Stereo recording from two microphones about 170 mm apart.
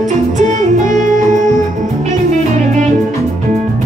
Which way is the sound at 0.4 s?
45° right (ahead or behind).